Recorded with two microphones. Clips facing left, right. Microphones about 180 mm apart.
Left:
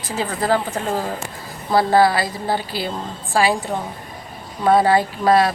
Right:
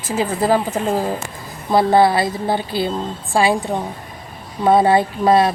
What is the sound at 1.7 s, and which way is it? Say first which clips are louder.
A woman's voice: right 2 dB; 25° right (ahead or behind).